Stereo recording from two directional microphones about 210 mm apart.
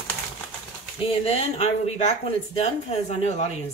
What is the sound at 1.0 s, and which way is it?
A woman's voice, 25° left (ahead or behind).